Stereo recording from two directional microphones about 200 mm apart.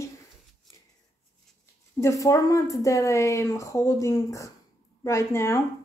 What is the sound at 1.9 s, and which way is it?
Speech, 15° left (ahead or behind).